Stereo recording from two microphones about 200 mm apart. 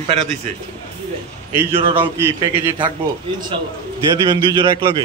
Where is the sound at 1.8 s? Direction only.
25° right (ahead or behind).